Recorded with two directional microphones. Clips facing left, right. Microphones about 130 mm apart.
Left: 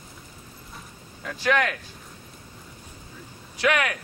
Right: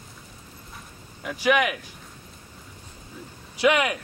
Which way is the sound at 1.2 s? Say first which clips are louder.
Right 2 dB; 10° right (ahead or behind).